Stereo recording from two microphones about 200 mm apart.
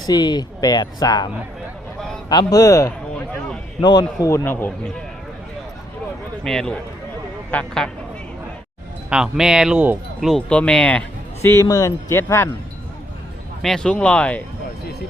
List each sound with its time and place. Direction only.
0.0 s speech: 20° left (ahead or behind)
2.3 s a man's voice: 20° left (ahead or behind)
6.4 s speech: 5° left (ahead or behind)
9.0 s a man's voice: 5° right (ahead or behind); by 12.5 s 15° left (ahead or behind)
13.6 s speech: centre (ahead or behind)